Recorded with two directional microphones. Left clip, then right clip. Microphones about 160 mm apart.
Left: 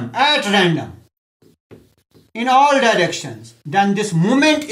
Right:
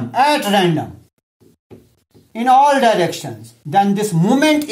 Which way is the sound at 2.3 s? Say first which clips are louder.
Right 2 dB; 35° right (ahead or behind).